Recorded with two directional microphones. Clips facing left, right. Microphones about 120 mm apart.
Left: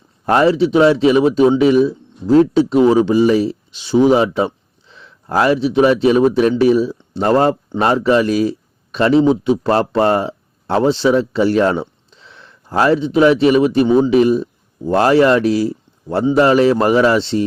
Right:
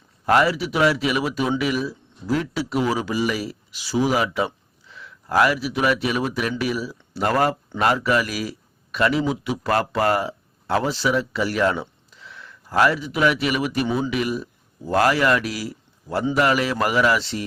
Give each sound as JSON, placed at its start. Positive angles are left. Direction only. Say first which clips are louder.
{"t": 0.3, "sound": "a man's voice", "louder": "left 6 dB", "side_deg": 25}